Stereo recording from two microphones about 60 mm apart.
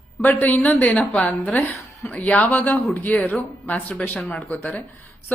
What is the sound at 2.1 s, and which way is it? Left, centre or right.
A woman's voice, left.